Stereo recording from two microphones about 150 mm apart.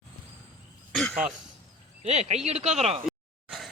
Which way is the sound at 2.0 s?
45° right (ahead or behind).